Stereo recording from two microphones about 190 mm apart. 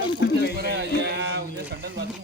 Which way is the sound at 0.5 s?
55° right (ahead or behind).